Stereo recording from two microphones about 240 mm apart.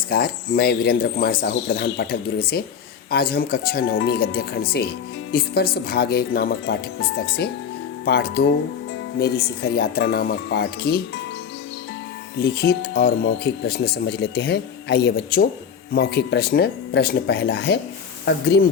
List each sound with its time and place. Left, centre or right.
0.1 s speech: left
12.4 s speech: left